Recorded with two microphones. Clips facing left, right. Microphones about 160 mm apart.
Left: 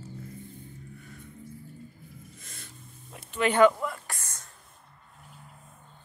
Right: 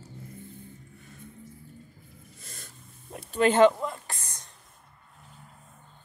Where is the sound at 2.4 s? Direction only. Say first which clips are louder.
Right 1 dB; 35° right (ahead or behind).